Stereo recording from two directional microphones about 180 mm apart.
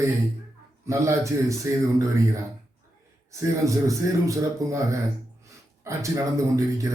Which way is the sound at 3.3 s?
15° right (ahead or behind).